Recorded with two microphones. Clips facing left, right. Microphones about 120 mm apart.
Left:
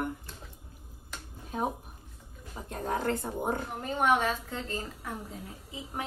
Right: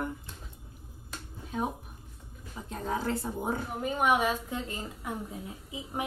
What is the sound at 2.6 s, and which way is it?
Speech, 55° left (ahead or behind).